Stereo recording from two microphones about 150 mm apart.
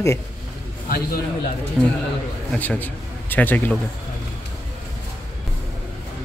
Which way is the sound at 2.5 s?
10° left (ahead or behind).